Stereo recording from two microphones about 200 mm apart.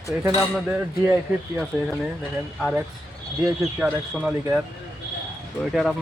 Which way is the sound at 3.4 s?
Centre (ahead or behind).